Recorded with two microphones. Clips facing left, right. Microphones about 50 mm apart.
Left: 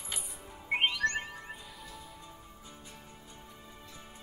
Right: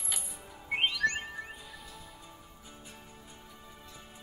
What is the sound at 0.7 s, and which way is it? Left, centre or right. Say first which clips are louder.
Music: left 1 dB; centre.